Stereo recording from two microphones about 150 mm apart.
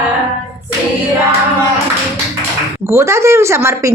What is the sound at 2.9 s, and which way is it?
Speech, 20° right (ahead or behind).